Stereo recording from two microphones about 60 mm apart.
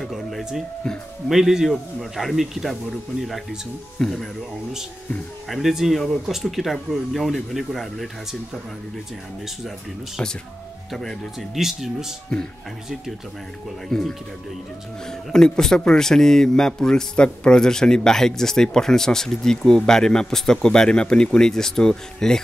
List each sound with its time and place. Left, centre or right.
0.1 s a sound: centre
1.3 s speech: centre
5.5 s speech: centre
10.9 s speech: centre
11.5 s speech: centre
13.8 s speech: centre